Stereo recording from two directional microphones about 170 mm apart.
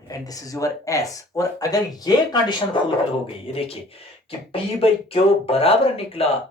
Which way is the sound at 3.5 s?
35° left (ahead or behind).